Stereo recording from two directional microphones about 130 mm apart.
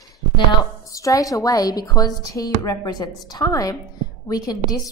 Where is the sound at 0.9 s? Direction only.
25° left (ahead or behind).